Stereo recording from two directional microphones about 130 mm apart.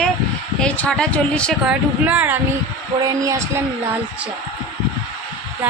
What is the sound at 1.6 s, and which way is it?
Speech, 10° right (ahead or behind).